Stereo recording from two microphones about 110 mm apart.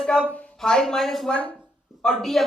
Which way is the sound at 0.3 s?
5° left (ahead or behind).